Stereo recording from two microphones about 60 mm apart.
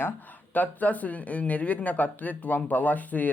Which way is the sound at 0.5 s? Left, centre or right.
Left.